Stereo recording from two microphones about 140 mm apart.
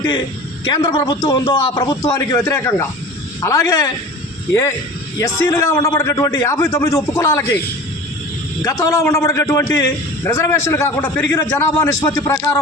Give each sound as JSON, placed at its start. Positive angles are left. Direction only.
{"t": 0.7, "sound": "a man's voice", "side_deg": 30}
{"t": 5.2, "sound": "a man's voice", "side_deg": 20}
{"t": 8.6, "sound": "a man's voice", "side_deg": 20}